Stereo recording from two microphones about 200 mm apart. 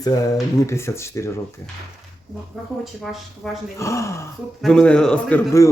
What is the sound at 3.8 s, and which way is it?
A man's voice, 15° left (ahead or behind).